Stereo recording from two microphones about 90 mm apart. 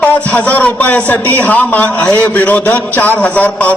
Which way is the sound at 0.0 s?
15° left (ahead or behind).